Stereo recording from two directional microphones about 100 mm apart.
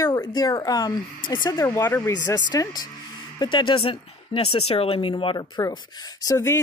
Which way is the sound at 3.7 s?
70° left (ahead or behind).